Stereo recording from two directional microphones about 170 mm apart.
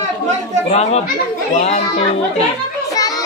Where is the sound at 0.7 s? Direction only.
40° left (ahead or behind).